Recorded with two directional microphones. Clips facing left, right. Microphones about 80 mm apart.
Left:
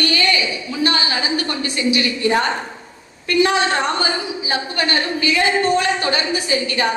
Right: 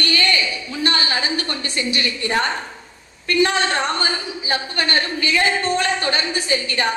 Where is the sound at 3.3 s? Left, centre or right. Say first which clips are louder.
Left 2 dB; right.